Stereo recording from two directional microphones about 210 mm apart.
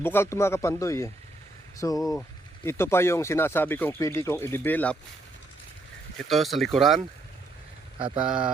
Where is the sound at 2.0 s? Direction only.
Centre (ahead or behind).